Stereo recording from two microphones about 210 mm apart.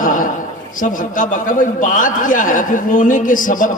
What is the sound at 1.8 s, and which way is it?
A man's voice, 40° left (ahead or behind).